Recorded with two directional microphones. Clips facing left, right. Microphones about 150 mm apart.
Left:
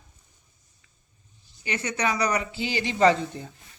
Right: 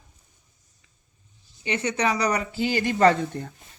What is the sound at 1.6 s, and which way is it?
Speech, 30° right (ahead or behind).